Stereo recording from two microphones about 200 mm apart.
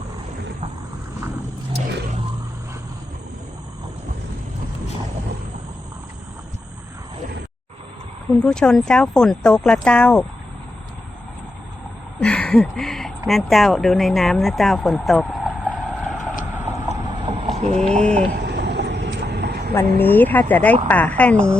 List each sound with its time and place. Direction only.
8.4 s speech: 5° left (ahead or behind)
12.2 s speech: 5° left (ahead or behind)
16.1 s vehicle: 40° left (ahead or behind)
17.2 s vehicle: 30° right (ahead or behind)
17.8 s speech: 5° left (ahead or behind)
18.3 s vehicle: 55° right (ahead or behind)
20.0 s speech: 10° left (ahead or behind)